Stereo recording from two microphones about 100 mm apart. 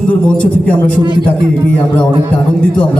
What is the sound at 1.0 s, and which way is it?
Speech, 50° right (ahead or behind).